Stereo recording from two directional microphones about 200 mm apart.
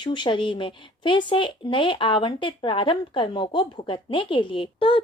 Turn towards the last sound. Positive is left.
turn(degrees=25)  # may be behind; listen again after turning